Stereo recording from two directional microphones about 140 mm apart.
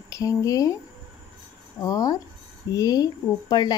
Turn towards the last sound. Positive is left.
turn(degrees=30)  # may be behind; listen again after turning